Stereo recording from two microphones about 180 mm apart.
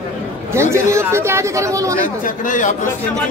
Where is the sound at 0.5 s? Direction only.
15° right (ahead or behind).